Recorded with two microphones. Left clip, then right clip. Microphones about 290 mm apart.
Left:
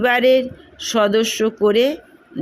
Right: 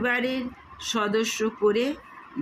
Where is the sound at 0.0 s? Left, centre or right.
Left.